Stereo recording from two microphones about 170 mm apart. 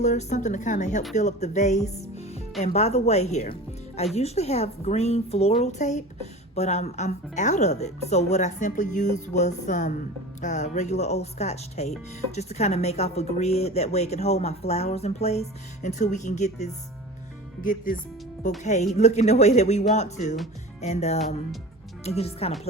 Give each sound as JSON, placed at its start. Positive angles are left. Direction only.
{"t": 0.0, "sound": "a woman's voice", "side_deg": 45}